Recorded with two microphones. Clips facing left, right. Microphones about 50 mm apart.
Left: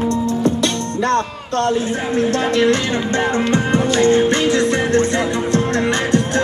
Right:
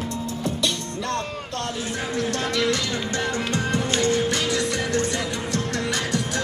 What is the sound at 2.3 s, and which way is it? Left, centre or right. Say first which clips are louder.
Music: left 8 dB; left.